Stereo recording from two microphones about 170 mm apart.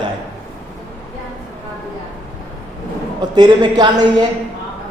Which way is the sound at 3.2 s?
25° right (ahead or behind).